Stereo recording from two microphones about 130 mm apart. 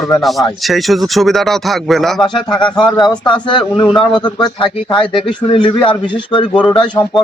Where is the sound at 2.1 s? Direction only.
35° left (ahead or behind).